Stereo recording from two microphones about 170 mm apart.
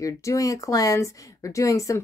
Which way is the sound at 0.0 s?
20° left (ahead or behind).